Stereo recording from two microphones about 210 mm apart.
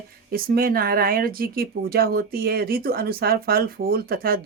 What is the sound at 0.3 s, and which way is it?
Speech, 45° right (ahead or behind).